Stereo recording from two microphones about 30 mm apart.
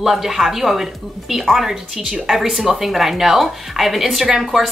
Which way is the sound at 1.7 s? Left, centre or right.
Centre.